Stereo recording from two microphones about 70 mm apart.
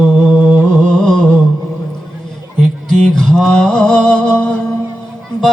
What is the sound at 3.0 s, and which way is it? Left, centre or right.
Mantra, centre.